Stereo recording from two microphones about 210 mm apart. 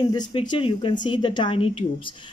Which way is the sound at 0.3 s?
25° left (ahead or behind).